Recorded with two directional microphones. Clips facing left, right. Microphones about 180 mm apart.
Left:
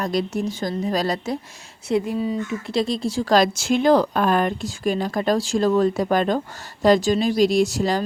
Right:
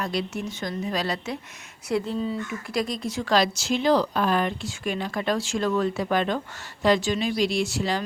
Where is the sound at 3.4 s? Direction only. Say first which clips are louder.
Left 4 dB; 50° left (ahead or behind).